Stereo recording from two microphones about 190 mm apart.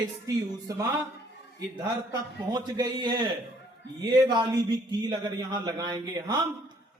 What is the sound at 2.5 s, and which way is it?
A man's voice, 20° right (ahead or behind).